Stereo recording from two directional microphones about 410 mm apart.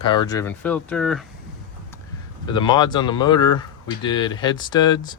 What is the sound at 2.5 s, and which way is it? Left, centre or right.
Speech, centre.